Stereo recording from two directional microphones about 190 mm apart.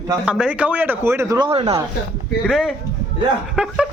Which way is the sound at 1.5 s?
30° right (ahead or behind).